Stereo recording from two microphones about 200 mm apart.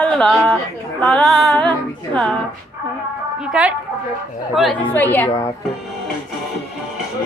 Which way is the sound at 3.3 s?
5° right (ahead or behind).